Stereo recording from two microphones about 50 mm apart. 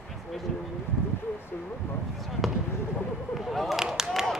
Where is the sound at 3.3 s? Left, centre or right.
Centre.